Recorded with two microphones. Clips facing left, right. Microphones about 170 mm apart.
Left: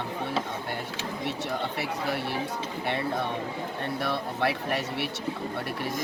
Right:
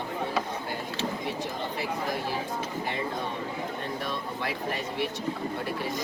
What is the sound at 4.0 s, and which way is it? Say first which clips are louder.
Speech: left 4 dB; 70° left (ahead or behind).